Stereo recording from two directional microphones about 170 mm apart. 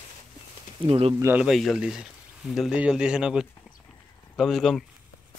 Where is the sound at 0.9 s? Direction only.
35° right (ahead or behind).